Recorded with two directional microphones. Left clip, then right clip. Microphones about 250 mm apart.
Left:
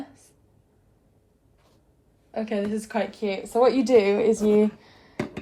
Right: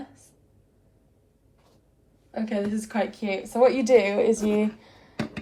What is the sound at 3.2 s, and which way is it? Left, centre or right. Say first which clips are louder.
A woman's voice: even; left.